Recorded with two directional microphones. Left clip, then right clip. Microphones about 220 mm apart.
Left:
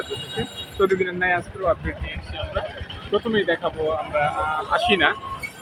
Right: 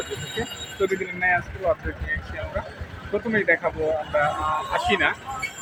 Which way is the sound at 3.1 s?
5° left (ahead or behind).